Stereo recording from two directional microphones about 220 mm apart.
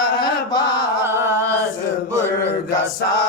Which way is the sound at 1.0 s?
15° right (ahead or behind).